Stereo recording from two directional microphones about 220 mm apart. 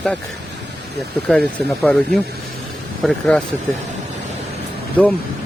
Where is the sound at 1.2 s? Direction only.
5° left (ahead or behind).